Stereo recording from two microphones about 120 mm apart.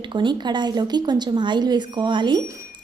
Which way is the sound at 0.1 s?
40° right (ahead or behind).